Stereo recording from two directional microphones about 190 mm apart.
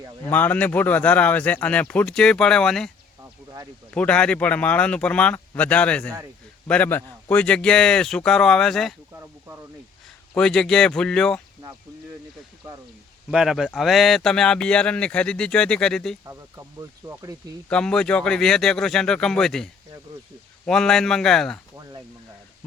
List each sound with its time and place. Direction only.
0.3 s speech: 10° left (ahead or behind)
3.9 s speech: 5° left (ahead or behind)
10.3 s speech: 5° left (ahead or behind)
13.3 s speech: centre (ahead or behind)
16.2 s speech: 15° right (ahead or behind)
17.7 s speech: 5° left (ahead or behind)